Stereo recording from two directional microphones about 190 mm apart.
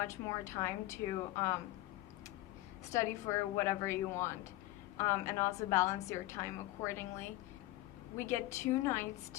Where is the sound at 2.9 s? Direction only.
15° left (ahead or behind).